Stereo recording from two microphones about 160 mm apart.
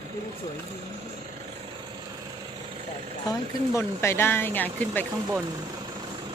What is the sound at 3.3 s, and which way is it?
Speech, 15° left (ahead or behind).